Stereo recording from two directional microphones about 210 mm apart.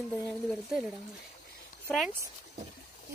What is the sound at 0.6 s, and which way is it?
Speech, centre (ahead or behind).